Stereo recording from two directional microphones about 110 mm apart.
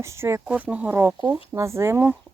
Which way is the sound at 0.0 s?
25° right (ahead or behind).